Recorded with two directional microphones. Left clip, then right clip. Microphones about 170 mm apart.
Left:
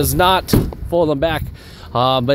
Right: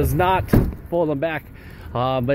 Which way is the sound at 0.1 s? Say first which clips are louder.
Left 6 dB; 30° left (ahead or behind).